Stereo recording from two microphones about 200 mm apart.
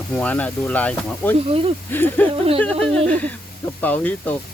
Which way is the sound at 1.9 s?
10° left (ahead or behind).